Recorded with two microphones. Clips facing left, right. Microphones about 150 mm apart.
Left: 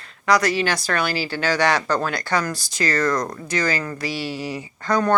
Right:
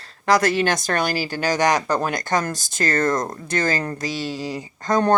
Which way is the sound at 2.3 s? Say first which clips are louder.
Right 1 dB; 45° right (ahead or behind).